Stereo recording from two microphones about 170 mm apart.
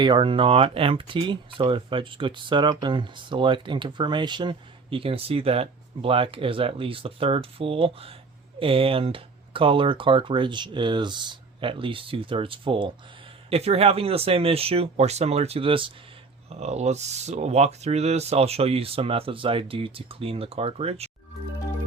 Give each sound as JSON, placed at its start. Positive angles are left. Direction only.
{"t": 0.0, "sound": "speech", "side_deg": -30}